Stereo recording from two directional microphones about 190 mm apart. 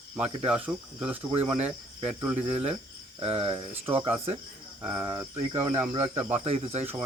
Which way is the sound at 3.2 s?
30° right (ahead or behind).